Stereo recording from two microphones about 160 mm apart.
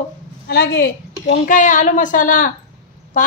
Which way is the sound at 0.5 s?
90° left.